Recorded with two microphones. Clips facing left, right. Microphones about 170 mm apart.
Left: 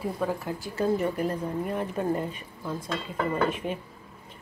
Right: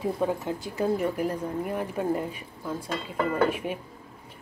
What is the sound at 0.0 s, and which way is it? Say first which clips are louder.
Speech: right 2 dB; 20° right (ahead or behind).